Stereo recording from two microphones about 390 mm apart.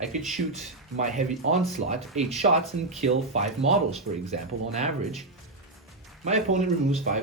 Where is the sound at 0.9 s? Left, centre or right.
Centre.